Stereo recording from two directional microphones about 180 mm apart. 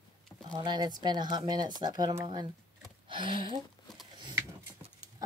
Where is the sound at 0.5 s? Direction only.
25° right (ahead or behind).